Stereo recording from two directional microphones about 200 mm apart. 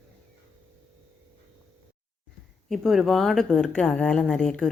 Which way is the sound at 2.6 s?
Centre (ahead or behind).